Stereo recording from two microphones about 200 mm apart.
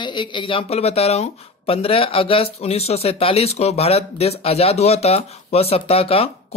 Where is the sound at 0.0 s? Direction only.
25° left (ahead or behind).